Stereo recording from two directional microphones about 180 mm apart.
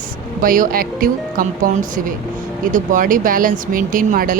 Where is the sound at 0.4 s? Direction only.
50° right (ahead or behind).